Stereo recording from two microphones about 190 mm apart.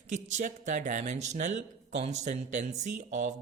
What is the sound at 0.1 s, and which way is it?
Speech, 40° right (ahead or behind).